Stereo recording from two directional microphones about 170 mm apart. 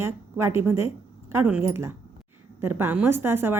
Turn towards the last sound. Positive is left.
turn(degrees=-15)  # may be behind; listen again after turning